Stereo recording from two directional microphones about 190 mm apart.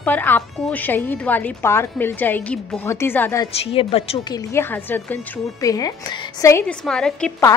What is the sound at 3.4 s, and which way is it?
Speech, 30° left (ahead or behind).